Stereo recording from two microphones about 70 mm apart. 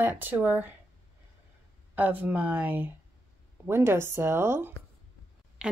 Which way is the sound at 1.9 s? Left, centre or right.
Right.